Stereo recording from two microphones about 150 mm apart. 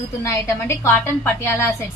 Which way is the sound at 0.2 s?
15° left (ahead or behind).